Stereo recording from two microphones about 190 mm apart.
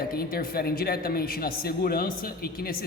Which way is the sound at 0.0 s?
50° left (ahead or behind).